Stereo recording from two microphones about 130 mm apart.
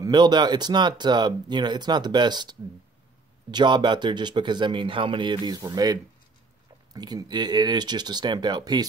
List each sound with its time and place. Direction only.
0.0 s speech: 35° right (ahead or behind)
3.5 s speech: 35° right (ahead or behind)